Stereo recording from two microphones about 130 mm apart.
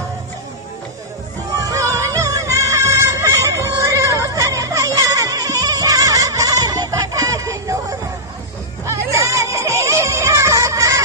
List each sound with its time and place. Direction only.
1.6 s music: 25° right (ahead or behind)